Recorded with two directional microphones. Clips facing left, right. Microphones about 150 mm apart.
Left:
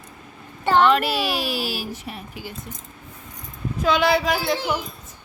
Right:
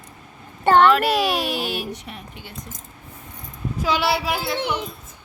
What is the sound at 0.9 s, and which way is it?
Speech, centre (ahead or behind).